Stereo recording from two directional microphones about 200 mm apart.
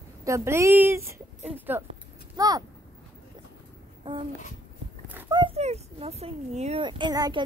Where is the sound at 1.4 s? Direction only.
10° right (ahead or behind).